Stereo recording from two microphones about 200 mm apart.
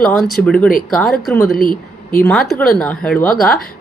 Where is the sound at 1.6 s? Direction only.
45° left (ahead or behind).